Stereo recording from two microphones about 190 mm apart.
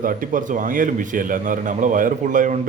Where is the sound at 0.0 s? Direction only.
45° right (ahead or behind).